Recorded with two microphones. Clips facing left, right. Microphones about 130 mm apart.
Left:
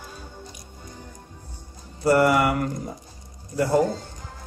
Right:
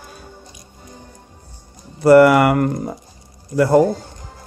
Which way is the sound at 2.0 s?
65° right (ahead or behind).